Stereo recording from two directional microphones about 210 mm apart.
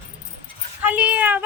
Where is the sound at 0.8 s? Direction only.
5° right (ahead or behind).